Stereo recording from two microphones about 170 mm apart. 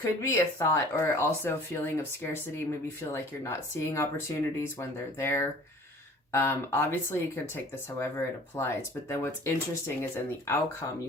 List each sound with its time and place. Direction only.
0.2 s speech: 15° left (ahead or behind)